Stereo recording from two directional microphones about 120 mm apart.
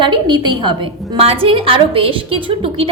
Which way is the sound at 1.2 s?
50° right (ahead or behind).